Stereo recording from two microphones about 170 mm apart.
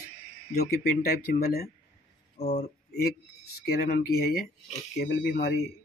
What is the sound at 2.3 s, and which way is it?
Speech, 40° left (ahead or behind).